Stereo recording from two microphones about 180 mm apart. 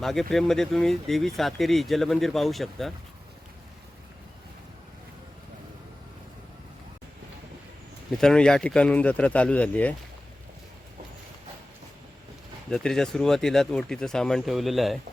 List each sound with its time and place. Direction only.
0.0 s speech: centre (ahead or behind)
8.1 s speech: 5° left (ahead or behind)
12.7 s speech: centre (ahead or behind)